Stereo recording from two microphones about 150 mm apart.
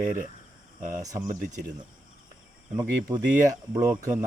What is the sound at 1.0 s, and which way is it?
Speech, 25° right (ahead or behind).